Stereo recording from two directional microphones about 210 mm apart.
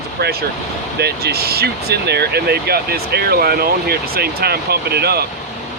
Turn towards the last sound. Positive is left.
turn(degrees=-50)  # may be behind; listen again after turning